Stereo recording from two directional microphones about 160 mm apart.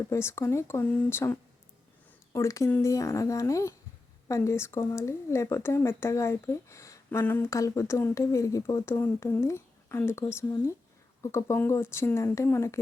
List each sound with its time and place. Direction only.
0.1 s speech: 15° left (ahead or behind)